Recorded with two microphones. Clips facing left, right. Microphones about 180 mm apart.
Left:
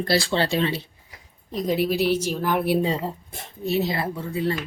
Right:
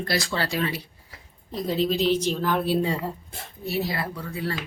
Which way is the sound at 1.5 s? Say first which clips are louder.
Left 2 dB; 15° left (ahead or behind).